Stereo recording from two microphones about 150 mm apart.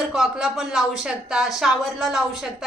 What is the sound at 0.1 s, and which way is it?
A woman's voice, centre (ahead or behind).